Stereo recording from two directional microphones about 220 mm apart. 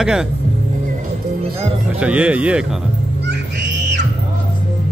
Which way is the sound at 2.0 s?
5° right (ahead or behind).